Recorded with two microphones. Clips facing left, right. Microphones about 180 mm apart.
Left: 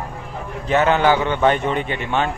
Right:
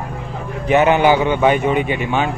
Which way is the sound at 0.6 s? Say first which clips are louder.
Right 3 dB; 15° right (ahead or behind).